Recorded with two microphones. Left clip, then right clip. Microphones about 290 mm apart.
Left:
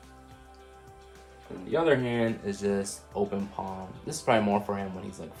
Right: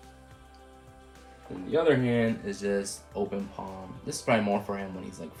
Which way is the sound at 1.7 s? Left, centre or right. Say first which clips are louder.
Right 1 dB; centre.